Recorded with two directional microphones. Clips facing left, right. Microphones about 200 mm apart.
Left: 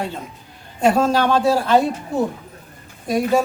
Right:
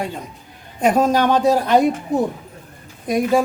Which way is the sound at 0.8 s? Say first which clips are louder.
Right 1 dB; 15° right (ahead or behind).